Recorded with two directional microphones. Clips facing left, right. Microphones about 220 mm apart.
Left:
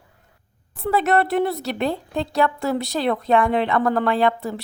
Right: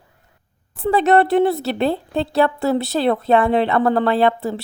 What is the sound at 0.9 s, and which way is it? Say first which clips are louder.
A woman's voice: right 5 dB; 30° right (ahead or behind).